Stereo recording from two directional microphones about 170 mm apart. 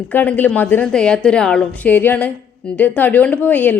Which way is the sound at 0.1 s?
10° left (ahead or behind).